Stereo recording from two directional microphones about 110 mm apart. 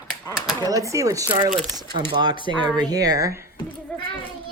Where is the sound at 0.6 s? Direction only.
30° right (ahead or behind).